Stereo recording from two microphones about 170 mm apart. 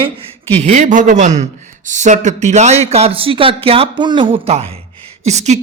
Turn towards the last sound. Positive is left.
turn(degrees=-40)  # may be behind; listen again after turning